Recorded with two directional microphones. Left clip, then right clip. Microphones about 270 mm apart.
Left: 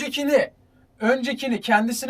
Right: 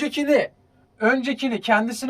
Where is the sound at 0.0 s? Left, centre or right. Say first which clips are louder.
Right 2 dB; centre.